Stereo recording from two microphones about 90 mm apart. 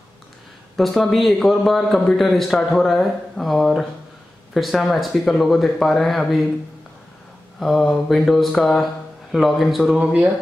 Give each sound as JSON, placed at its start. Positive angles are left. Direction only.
{"t": 0.7, "sound": "a man's voice", "side_deg": 5}
{"t": 7.6, "sound": "a man's voice", "side_deg": 0}
{"t": 9.9, "sound": "speech", "side_deg": -15}